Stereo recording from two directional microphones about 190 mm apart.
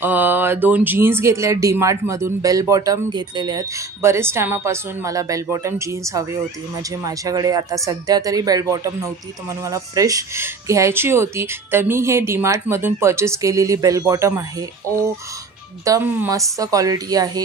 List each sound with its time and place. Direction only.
0.0 s speech: 10° right (ahead or behind)